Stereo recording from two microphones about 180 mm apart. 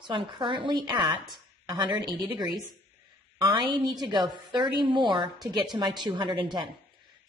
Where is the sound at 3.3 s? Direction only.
25° right (ahead or behind).